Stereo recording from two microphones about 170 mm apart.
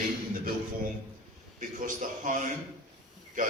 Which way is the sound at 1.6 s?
50° right (ahead or behind).